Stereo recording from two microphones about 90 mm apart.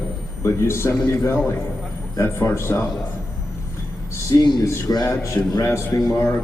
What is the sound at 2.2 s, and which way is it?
Speech, 30° left (ahead or behind).